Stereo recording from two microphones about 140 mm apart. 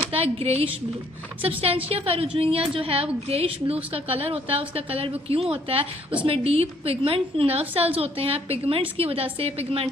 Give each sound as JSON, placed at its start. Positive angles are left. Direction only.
{"t": 0.1, "sound": "a woman's voice", "side_deg": -45}